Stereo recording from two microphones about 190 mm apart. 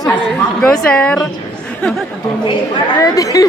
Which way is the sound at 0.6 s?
5° left (ahead or behind).